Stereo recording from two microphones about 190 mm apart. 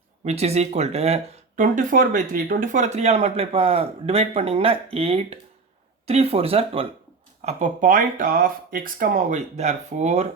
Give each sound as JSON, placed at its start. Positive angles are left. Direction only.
{"t": 0.3, "sound": "speech", "side_deg": -35}
{"t": 7.4, "sound": "speech", "side_deg": -40}